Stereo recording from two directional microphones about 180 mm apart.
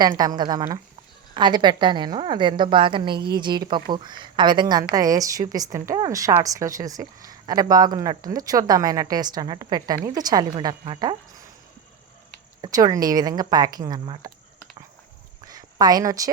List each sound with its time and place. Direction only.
0.2 s a woman's voice: 25° right (ahead or behind)
12.6 s a woman's voice: 20° right (ahead or behind)
15.4 s a sound: 20° right (ahead or behind)